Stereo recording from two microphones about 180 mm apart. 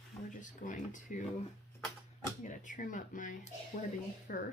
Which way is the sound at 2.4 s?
45° left (ahead or behind).